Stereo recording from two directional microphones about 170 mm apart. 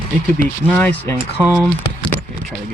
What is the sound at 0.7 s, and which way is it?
Speech, 10° left (ahead or behind).